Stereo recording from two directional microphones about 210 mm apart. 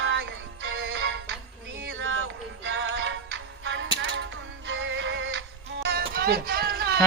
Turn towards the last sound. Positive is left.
turn(degrees=-50)  # may be behind; listen again after turning